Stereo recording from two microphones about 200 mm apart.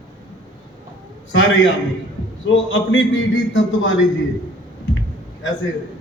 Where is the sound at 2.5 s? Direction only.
70° left (ahead or behind).